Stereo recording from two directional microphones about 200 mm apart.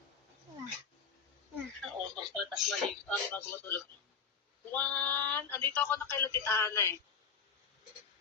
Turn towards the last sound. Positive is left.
turn(degrees=15)  # may be behind; listen again after turning